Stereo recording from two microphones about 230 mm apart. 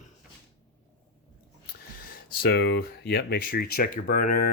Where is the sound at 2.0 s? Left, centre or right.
Left.